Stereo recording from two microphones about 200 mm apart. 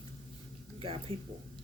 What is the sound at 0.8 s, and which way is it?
Speech, 25° right (ahead or behind).